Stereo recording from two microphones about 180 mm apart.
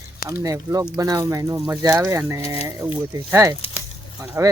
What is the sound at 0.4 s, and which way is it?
Speech, 20° right (ahead or behind).